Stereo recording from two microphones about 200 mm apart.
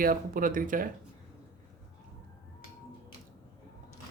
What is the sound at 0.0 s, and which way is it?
Speech, 45° right (ahead or behind).